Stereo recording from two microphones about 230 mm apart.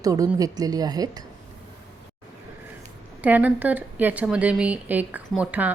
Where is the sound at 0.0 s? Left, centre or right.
Centre.